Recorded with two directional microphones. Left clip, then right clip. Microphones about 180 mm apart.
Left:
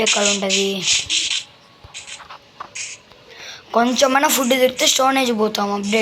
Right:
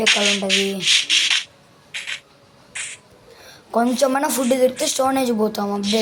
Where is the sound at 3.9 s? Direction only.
10° right (ahead or behind).